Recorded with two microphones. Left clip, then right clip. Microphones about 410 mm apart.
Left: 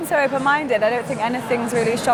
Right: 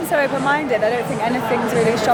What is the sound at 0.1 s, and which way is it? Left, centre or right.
A woman's voice, left.